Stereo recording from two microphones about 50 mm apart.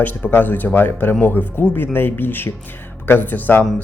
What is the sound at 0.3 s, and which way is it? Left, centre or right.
Speech, left.